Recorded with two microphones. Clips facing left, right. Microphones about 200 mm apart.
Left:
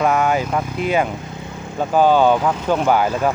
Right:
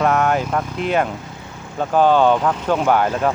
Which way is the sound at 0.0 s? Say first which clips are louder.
Even; centre (ahead or behind).